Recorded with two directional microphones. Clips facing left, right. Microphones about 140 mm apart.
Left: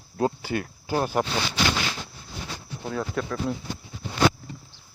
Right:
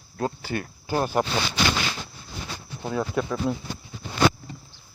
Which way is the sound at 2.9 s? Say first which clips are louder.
Right 3 dB; 10° right (ahead or behind).